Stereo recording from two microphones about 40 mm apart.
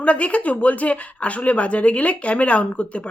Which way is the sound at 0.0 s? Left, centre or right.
Left.